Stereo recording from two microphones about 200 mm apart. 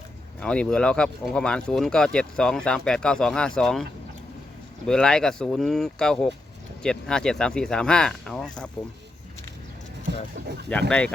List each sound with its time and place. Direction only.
0.3 s speech: 5° left (ahead or behind)
4.9 s speech: 5° left (ahead or behind)
10.1 s speech: 60° right (ahead or behind)
10.7 s speech: 5° left (ahead or behind)